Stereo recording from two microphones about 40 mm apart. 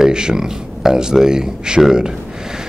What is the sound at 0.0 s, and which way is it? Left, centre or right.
Speech, centre.